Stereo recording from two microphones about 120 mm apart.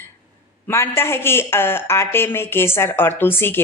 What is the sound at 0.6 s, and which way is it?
A woman's voice, 20° left (ahead or behind).